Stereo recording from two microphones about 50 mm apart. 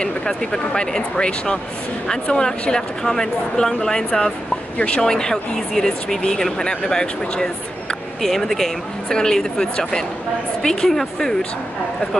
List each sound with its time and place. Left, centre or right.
0.0 s speech: centre